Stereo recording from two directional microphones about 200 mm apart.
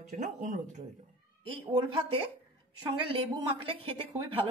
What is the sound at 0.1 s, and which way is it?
Speech, 35° right (ahead or behind).